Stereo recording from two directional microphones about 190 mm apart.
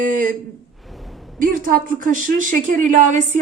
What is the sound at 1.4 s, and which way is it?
A woman's voice, 45° right (ahead or behind).